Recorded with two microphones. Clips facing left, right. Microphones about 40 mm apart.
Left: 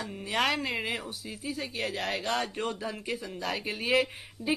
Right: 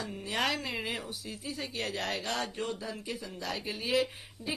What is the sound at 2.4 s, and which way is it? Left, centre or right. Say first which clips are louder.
Speech: left 3 dB; left.